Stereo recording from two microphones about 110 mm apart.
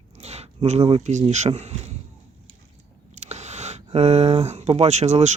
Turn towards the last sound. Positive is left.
turn(degrees=-90)